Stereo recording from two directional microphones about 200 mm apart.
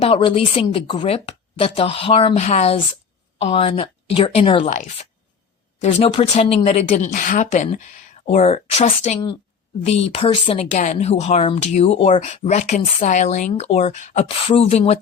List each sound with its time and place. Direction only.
0.0 s a woman's voice: 25° left (ahead or behind)
4.7 s speech: 40° left (ahead or behind)